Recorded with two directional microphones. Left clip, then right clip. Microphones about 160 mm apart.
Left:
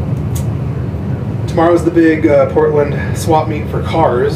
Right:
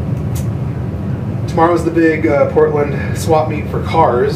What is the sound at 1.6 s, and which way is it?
A man's voice, 10° left (ahead or behind).